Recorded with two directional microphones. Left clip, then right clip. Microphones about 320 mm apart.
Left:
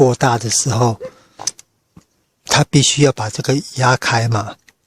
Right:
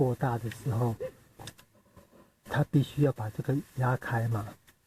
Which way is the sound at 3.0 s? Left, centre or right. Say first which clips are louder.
Left 15 dB; left.